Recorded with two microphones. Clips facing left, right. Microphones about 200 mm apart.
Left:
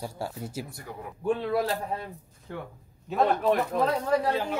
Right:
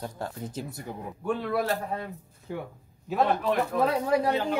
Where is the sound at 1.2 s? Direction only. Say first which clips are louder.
Left 1 dB; 30° left (ahead or behind).